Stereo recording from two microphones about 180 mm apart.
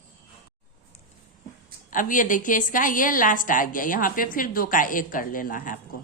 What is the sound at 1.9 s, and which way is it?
A woman's voice, 50° left (ahead or behind).